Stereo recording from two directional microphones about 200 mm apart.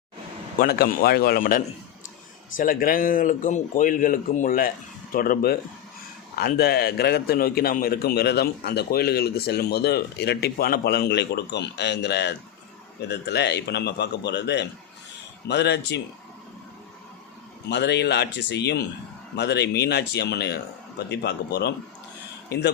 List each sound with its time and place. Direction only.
0.6 s a man's voice: 50° left (ahead or behind)
17.7 s a man's voice: 55° left (ahead or behind)